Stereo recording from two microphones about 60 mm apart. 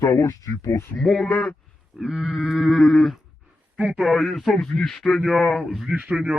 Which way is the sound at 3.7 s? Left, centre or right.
Centre.